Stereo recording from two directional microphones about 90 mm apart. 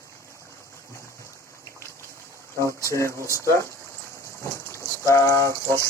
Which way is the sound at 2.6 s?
35° right (ahead or behind).